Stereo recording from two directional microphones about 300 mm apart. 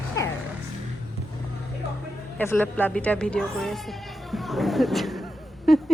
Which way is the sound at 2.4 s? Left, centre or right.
Centre.